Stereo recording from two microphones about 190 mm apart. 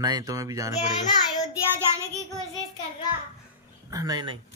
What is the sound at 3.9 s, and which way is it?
Speech, 20° right (ahead or behind).